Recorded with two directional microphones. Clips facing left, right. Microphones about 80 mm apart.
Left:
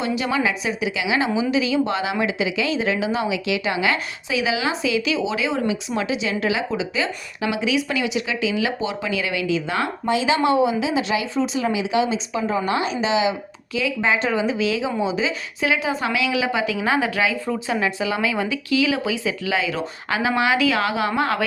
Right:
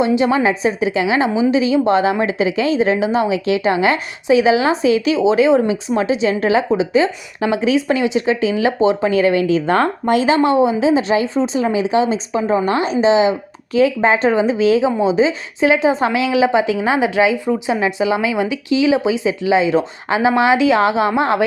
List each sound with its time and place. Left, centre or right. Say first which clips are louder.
0.0 s a woman's voice: right 7 dB; right